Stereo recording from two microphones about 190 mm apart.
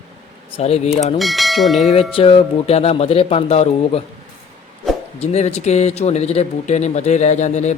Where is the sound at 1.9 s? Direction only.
30° left (ahead or behind).